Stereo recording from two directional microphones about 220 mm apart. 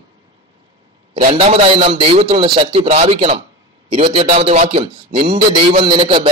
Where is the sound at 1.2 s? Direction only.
30° right (ahead or behind).